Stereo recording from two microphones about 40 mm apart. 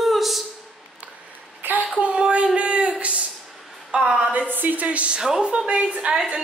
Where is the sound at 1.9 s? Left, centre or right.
Right.